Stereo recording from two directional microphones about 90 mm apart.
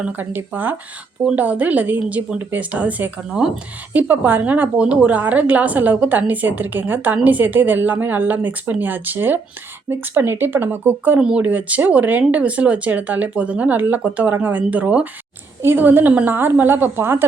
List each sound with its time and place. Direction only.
0.0 s a woman's voice: 20° right (ahead or behind)